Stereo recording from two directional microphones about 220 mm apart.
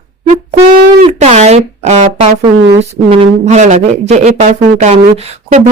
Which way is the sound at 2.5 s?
50° right (ahead or behind).